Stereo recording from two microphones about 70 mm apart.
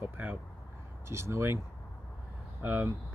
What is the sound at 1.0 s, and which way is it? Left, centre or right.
Speech, right.